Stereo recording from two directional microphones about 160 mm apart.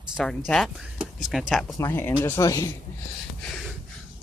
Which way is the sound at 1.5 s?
Centre (ahead or behind).